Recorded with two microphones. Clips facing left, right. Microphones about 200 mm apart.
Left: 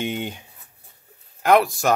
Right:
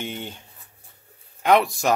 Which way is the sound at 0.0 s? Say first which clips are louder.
Left 6 dB; 15° left (ahead or behind).